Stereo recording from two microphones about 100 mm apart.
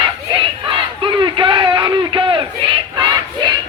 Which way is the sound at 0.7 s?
55° right (ahead or behind).